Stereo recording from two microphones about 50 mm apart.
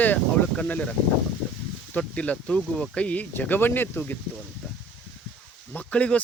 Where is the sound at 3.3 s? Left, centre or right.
Left.